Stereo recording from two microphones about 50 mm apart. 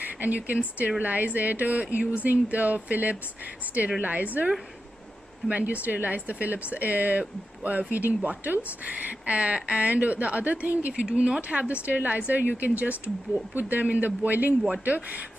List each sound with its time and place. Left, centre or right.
0.0 s speech: right
10.9 s speech: centre
11.4 s speech: right